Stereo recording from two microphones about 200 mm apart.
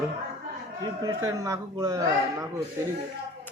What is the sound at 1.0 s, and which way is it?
Speech, 15° right (ahead or behind).